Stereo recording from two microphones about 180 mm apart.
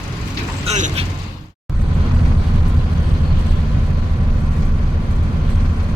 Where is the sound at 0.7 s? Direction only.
40° right (ahead or behind).